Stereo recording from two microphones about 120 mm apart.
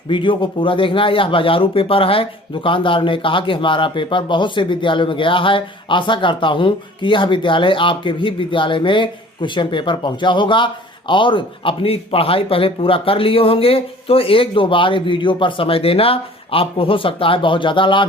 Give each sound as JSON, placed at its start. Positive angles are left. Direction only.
{"t": 0.1, "sound": "speech", "side_deg": 45}